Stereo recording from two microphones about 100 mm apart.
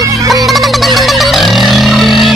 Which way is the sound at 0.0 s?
35° right (ahead or behind).